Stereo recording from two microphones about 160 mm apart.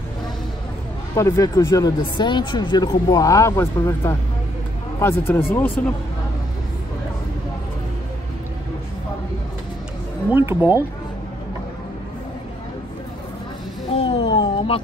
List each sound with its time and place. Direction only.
1.1 s speech: 20° left (ahead or behind)
10.3 s speech: 15° right (ahead or behind)
13.9 s a sound: 35° left (ahead or behind)